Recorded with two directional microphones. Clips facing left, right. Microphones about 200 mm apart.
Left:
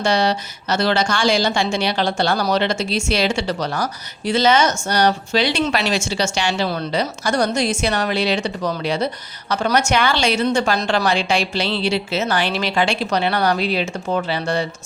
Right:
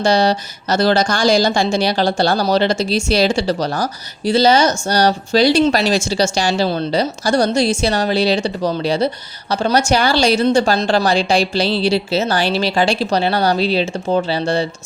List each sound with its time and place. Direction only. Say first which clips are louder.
0.0 s a woman's voice: right 4 dB; 35° right (ahead or behind)